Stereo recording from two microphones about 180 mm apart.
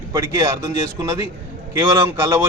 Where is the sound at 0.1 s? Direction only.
15° right (ahead or behind).